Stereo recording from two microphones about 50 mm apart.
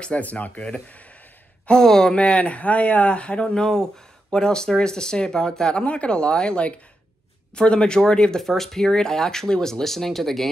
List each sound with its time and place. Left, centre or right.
0.0 s speech: left
0.6 s speech: centre
2.1 s speech: left
3.6 s speech: centre